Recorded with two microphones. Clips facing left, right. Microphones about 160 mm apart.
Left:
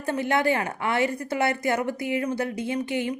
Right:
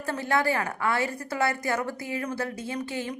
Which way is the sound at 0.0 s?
20° left (ahead or behind).